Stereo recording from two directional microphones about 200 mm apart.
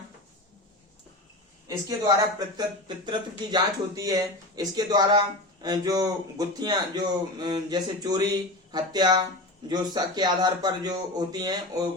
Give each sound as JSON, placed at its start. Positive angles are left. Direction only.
{"t": 1.6, "sound": "speech", "side_deg": -15}